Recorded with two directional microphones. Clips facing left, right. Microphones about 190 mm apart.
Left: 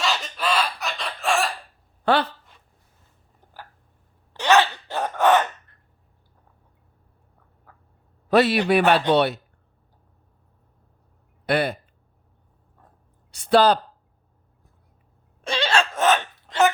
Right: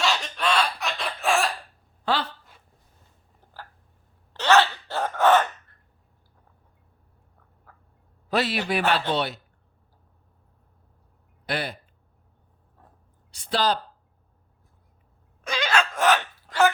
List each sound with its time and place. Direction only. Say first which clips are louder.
0.0 s chicken: even; centre (ahead or behind)
3.4 s a sound: even; 15° left (ahead or behind)
8.3 s speech: left 7 dB; 60° left (ahead or behind)
11.4 s speech: left 8 dB; 60° left (ahead or behind)
13.3 s speech: left 8 dB; 60° left (ahead or behind)
15.4 s a sound: left 2 dB; 30° left (ahead or behind)